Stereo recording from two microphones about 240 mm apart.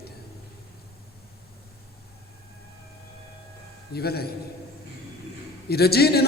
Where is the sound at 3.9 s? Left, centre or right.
Left.